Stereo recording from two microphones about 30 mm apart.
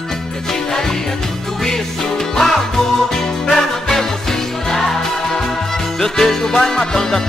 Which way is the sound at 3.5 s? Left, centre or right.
Centre.